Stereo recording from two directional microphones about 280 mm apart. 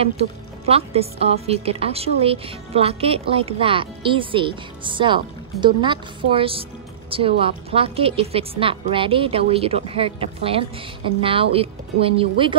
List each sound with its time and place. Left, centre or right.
0.0 s a woman's voice: right